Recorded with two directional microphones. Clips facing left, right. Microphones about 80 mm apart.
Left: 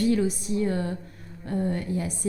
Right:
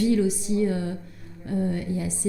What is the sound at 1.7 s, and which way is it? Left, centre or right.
Speech, left.